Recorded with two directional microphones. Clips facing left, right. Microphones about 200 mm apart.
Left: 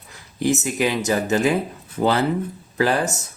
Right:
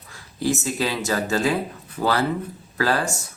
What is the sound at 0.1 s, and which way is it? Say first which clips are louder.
Speech: left 3 dB; 20° left (ahead or behind).